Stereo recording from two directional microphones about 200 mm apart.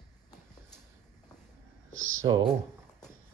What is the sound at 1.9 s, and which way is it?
Speech, 80° right.